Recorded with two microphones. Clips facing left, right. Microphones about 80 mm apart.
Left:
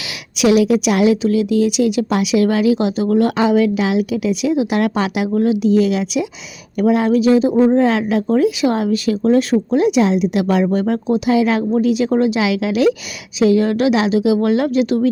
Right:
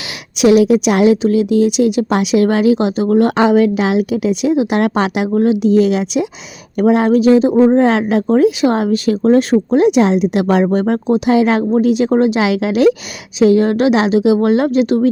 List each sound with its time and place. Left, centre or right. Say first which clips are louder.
0.3 s a woman's voice: right 3 dB; right
7.5 s a woman's voice: right 3 dB; right
7.8 s a woman's voice: right 3 dB; right